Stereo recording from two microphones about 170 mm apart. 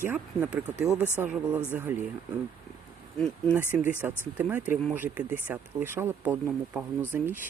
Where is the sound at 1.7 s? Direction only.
10° right (ahead or behind).